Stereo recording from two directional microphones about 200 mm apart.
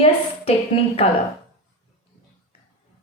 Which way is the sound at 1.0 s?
30° left (ahead or behind).